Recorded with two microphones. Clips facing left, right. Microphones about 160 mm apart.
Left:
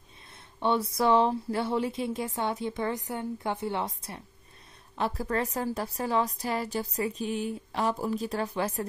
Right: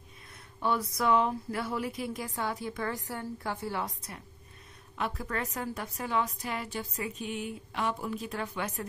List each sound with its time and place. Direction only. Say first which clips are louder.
0.6 s a woman's voice: left 4 dB; 25° left (ahead or behind)